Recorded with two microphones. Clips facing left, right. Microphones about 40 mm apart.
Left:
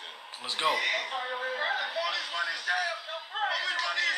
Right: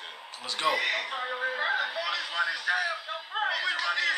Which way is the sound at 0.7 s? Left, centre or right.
Centre.